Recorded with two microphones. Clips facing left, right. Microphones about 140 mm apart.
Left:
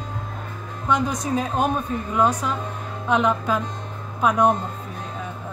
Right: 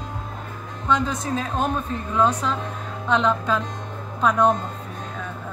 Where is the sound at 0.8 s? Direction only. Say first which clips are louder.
Even; 15° left (ahead or behind).